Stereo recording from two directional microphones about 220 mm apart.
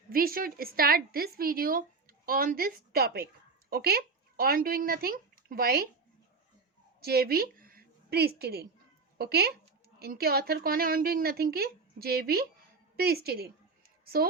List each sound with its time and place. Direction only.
0.1 s a woman's voice: 40° right (ahead or behind)
7.0 s a woman's voice: 45° right (ahead or behind)